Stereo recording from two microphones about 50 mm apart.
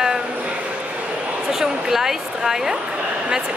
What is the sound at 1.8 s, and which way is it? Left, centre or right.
Speech, centre.